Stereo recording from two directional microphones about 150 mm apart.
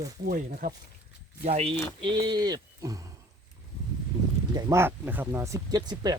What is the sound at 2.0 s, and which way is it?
Speech, 30° right (ahead or behind).